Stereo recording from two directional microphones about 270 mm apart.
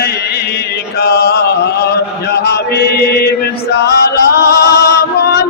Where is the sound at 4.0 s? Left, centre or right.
Left.